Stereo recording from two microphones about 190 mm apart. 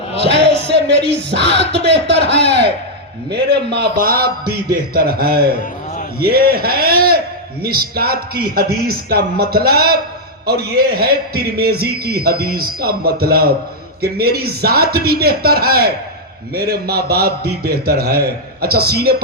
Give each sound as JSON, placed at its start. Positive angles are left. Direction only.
{"t": 0.3, "sound": "a man's voice", "side_deg": -65}